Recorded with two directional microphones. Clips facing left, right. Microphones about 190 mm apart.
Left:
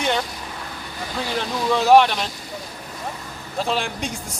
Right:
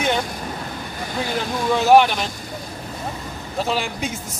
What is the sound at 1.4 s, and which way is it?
Speech, centre (ahead or behind).